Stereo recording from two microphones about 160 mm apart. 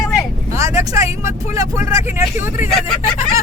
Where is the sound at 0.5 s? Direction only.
20° right (ahead or behind).